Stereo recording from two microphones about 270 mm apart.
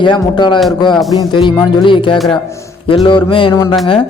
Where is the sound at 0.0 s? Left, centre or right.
Centre.